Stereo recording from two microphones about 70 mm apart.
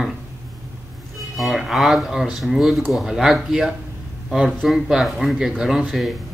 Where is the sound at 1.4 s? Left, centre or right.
Centre.